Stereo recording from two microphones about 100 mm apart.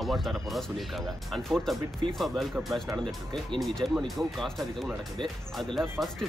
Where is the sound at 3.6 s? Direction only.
Centre (ahead or behind).